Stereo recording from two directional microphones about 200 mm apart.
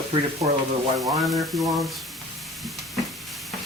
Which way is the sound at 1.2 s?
Centre (ahead or behind).